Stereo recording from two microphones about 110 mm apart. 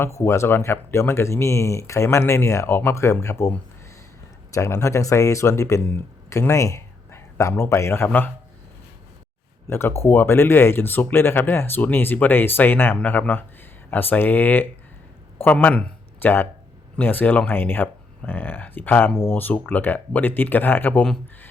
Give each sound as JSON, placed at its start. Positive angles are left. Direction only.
{"t": 0.0, "sound": "speech", "side_deg": 25}
{"t": 4.5, "sound": "speech", "side_deg": 30}
{"t": 9.6, "sound": "speech", "side_deg": 20}